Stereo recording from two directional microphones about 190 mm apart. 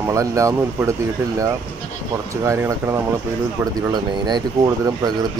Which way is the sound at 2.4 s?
15° right (ahead or behind).